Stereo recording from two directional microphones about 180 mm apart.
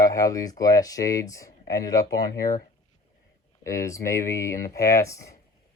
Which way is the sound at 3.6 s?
15° left (ahead or behind).